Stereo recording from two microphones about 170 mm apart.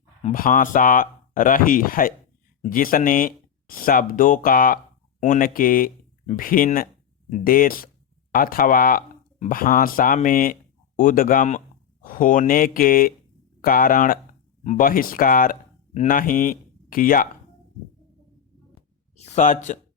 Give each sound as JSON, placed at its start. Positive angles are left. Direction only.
{"t": 0.3, "sound": "speech", "side_deg": 55}
{"t": 19.1, "sound": "speech", "side_deg": 40}